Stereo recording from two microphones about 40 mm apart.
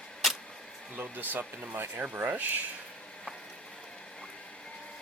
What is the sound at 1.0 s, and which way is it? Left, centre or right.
Speech, right.